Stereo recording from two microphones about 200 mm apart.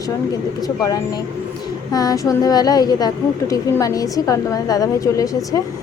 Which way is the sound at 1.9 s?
20° left (ahead or behind).